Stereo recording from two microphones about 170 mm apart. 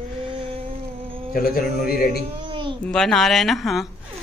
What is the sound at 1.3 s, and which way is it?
Speech, 60° left (ahead or behind).